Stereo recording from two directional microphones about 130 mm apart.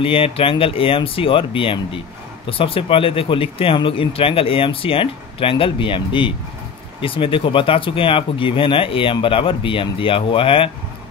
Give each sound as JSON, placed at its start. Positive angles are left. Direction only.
{"t": 0.0, "sound": "speech", "side_deg": 45}